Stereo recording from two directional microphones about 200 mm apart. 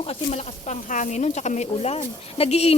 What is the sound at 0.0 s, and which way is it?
Speech, 30° left (ahead or behind).